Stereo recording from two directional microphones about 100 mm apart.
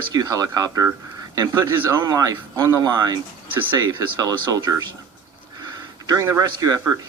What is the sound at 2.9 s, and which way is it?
Speech, 45° right (ahead or behind).